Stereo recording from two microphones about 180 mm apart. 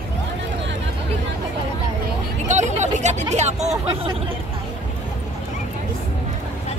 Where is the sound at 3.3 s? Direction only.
40° right (ahead or behind).